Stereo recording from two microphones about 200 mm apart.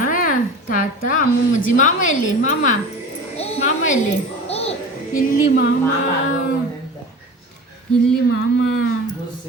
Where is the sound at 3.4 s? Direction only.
30° left (ahead or behind).